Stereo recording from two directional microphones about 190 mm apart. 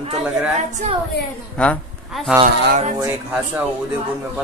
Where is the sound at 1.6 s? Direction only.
Centre (ahead or behind).